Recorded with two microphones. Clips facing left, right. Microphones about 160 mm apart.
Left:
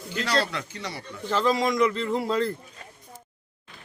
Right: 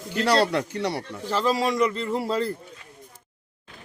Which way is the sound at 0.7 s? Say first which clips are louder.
Right 9 dB; 70° right (ahead or behind).